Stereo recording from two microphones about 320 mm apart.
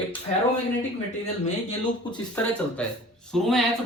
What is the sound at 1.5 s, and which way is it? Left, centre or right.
Speech, centre.